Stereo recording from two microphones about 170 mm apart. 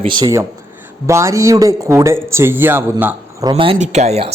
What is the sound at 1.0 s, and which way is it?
Speech, 15° right (ahead or behind).